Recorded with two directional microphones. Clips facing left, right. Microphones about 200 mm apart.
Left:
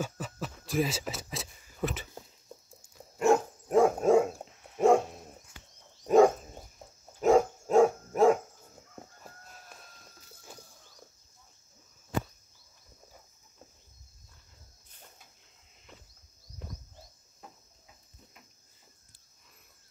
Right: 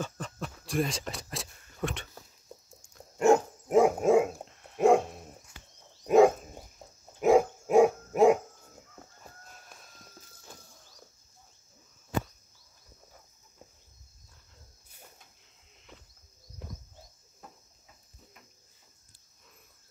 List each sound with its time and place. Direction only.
0.0 s a sound: 5° left (ahead or behind)
2.7 s dog: 5° left (ahead or behind)
3.6 s dog: 15° right (ahead or behind)
4.1 s dog: centre (ahead or behind)
6.0 s a sound: 10° right (ahead or behind)
7.2 s dog: 10° right (ahead or behind)